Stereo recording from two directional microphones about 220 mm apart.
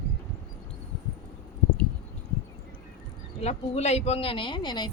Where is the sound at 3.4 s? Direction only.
30° left (ahead or behind).